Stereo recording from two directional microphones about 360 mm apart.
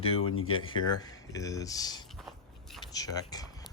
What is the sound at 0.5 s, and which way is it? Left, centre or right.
Speech, centre.